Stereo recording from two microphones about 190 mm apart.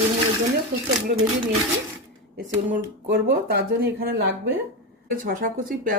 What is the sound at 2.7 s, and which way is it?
Speech, 50° right (ahead or behind).